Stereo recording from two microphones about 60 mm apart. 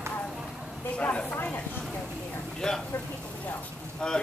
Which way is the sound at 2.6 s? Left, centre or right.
Centre.